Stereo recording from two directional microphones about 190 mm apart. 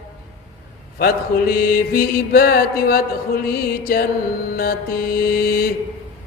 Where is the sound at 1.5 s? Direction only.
50° left (ahead or behind).